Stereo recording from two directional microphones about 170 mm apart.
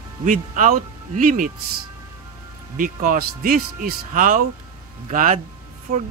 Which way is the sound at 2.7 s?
55° right (ahead or behind).